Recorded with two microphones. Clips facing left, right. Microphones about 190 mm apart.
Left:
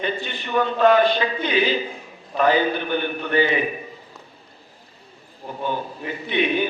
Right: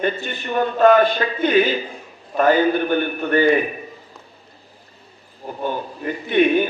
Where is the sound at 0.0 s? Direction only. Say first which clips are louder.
Right 4 dB; 50° right (ahead or behind).